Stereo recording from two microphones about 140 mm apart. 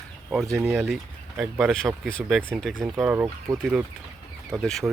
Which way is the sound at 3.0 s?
15° right (ahead or behind).